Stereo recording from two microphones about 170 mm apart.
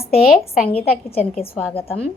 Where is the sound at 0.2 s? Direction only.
5° right (ahead or behind).